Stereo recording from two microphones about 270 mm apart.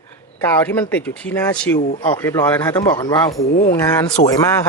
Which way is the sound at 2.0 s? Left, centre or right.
Centre.